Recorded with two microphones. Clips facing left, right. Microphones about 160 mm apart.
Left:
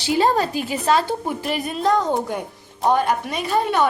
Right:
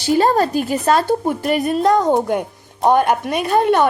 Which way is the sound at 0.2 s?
45° right (ahead or behind).